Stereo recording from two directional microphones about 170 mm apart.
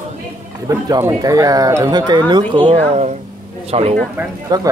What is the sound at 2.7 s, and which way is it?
Speech, 40° right (ahead or behind).